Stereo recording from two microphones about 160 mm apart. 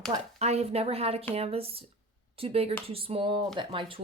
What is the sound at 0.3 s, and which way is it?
Speech, 40° right (ahead or behind).